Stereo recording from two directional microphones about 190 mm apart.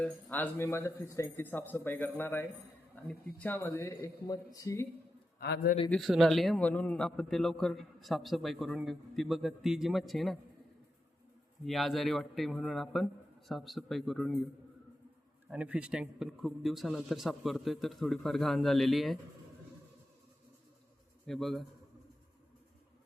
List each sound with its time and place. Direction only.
0.0 s speech: 10° left (ahead or behind)
5.4 s a man's voice: 60° left (ahead or behind)
5.9 s a man's voice: centre (ahead or behind)
11.6 s a man's voice: centre (ahead or behind)
15.4 s a man's voice: 5° right (ahead or behind)
21.2 s a man's voice: centre (ahead or behind)